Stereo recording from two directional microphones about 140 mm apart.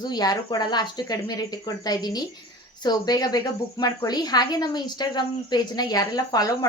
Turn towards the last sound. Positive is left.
turn(degrees=25)  # may be behind; listen again after turning